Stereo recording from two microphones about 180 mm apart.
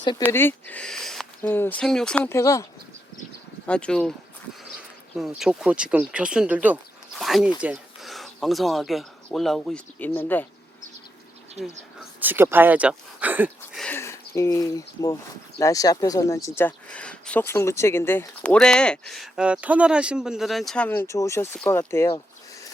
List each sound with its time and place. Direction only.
0.2 s speech: 10° left (ahead or behind)
1.4 s speech: 10° left (ahead or behind)
3.7 s speech: 5° left (ahead or behind)
5.1 s speech: centre (ahead or behind)
12.2 s speech: 10° right (ahead or behind)
13.7 s a sound: 10° left (ahead or behind)
15.5 s speech: 20° left (ahead or behind)